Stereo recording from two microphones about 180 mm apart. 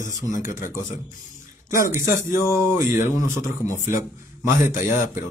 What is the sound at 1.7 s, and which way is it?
Speech, 15° right (ahead or behind).